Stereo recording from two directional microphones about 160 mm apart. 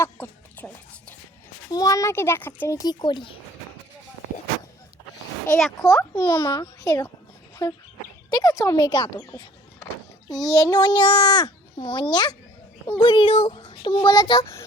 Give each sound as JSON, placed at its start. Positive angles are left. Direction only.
{"t": 0.0, "sound": "a sound", "side_deg": 10}
{"t": 1.7, "sound": "speech", "side_deg": 20}
{"t": 5.5, "sound": "speech", "side_deg": 0}
{"t": 5.8, "sound": "speech", "side_deg": 20}
{"t": 10.2, "sound": "a child's voice", "side_deg": 0}
{"t": 10.5, "sound": "speech", "side_deg": 20}
{"t": 13.0, "sound": "child singing", "side_deg": 35}